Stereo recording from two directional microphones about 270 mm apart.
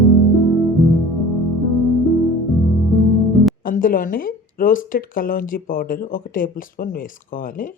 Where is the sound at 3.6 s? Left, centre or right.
Left.